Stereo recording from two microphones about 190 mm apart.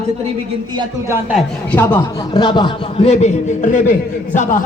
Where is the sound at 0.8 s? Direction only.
15° right (ahead or behind).